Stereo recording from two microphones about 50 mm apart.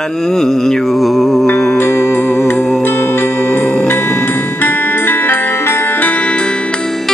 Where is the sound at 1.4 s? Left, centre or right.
Left.